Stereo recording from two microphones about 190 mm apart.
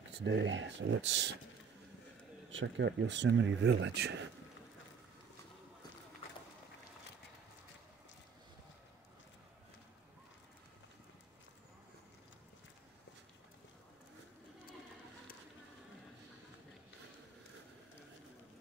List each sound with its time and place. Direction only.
0.1 s speech: 65° right (ahead or behind)
2.5 s speech: 70° right (ahead or behind)